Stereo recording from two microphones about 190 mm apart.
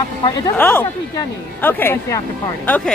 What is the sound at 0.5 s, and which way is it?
Speech, 10° left (ahead or behind).